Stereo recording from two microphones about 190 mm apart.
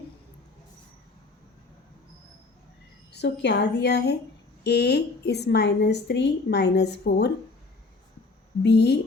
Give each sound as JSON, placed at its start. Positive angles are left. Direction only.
{"t": 3.1, "sound": "a woman's voice", "side_deg": 60}
{"t": 8.6, "sound": "a woman's voice", "side_deg": 65}